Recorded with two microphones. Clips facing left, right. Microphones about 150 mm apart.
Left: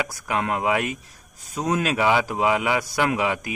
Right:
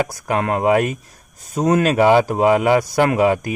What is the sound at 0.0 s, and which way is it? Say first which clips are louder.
A man's voice: right 6 dB; 40° right (ahead or behind).